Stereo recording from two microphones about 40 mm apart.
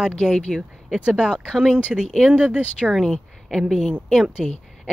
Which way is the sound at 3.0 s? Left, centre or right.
Centre.